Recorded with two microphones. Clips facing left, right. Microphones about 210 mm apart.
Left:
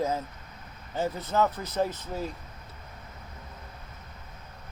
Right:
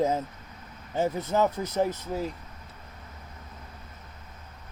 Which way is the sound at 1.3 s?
20° right (ahead or behind).